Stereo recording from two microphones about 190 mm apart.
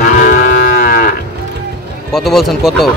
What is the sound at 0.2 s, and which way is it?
Moo, 45° left (ahead or behind).